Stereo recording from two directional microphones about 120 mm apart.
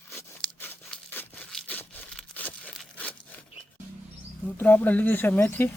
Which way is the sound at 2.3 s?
15° left (ahead or behind).